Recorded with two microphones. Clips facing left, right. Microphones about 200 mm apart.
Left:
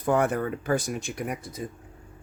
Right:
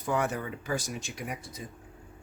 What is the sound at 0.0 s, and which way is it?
Speech, 55° left (ahead or behind).